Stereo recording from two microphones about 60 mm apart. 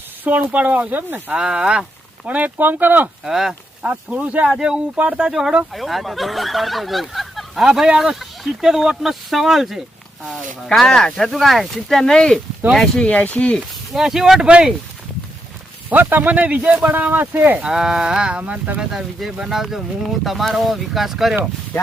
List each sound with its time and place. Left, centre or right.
0.3 s speech: right
1.3 s speech: centre; by 3.1 s right
3.2 s speech: centre
3.8 s speech: right
4.4 s speech: centre; by 13.6 s left
13.9 s speech: centre
15.9 s speech: right
17.7 s speech: centre
18.8 s speech: centre